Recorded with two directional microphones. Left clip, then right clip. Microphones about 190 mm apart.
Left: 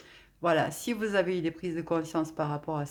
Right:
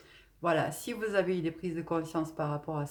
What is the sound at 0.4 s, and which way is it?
A woman's voice, 30° left (ahead or behind).